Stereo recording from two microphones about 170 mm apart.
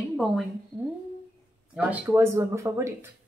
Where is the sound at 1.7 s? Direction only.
10° right (ahead or behind).